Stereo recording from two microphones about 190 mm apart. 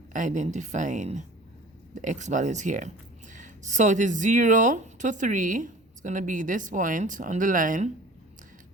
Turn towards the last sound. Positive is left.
turn(degrees=-45)  # may be behind; listen again after turning